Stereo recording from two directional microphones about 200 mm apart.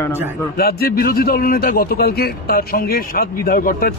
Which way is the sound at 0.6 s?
50° left (ahead or behind).